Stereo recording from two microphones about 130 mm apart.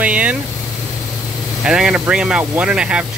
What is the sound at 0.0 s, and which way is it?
Vehicle, 10° right (ahead or behind).